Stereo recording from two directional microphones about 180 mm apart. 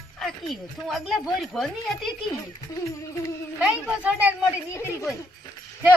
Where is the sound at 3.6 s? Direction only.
5° right (ahead or behind).